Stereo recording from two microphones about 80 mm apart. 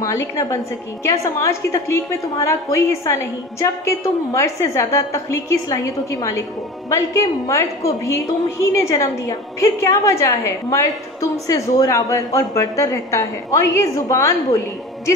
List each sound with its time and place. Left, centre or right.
0.0 s a woman's voice: left